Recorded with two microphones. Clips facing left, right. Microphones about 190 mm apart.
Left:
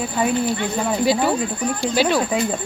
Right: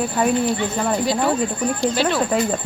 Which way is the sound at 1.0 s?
5° left (ahead or behind).